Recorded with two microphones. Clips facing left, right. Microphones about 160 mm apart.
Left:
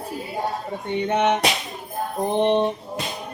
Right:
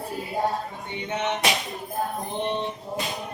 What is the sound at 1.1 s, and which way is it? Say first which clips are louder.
Male singing: left 4 dB; 60° left (ahead or behind).